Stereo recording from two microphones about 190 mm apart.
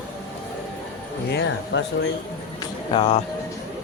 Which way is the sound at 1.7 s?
65° left (ahead or behind).